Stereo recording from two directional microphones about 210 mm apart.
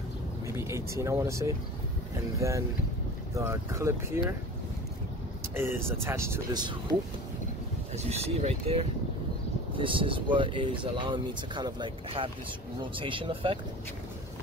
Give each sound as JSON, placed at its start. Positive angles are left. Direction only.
{"t": 0.5, "sound": "speech", "side_deg": -15}
{"t": 5.6, "sound": "speech", "side_deg": -10}
{"t": 8.0, "sound": "speech", "side_deg": -30}